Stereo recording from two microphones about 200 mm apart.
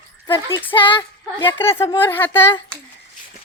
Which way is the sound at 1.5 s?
10° left (ahead or behind).